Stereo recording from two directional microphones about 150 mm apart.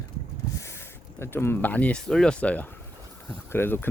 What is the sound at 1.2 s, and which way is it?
Speech, 15° left (ahead or behind).